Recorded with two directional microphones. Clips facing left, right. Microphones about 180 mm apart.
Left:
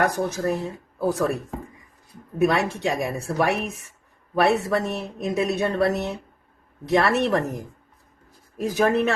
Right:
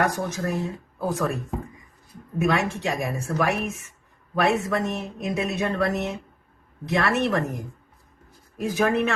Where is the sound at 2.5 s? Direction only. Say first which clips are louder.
Left 1 dB; 35° left (ahead or behind).